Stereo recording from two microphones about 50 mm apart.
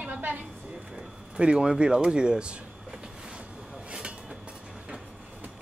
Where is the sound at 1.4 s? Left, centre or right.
Centre.